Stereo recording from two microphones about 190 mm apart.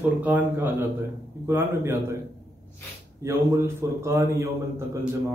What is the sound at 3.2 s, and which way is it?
Speech, 15° right (ahead or behind).